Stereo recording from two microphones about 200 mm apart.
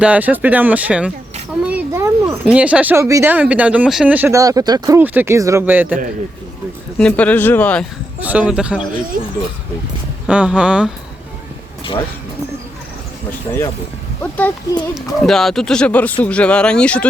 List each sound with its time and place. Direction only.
0.0 s speech: 5° right (ahead or behind)
7.0 s speech: 5° left (ahead or behind)
8.2 s speech: 5° right (ahead or behind)
10.2 s speech: 5° right (ahead or behind)
13.5 s speech: 15° left (ahead or behind)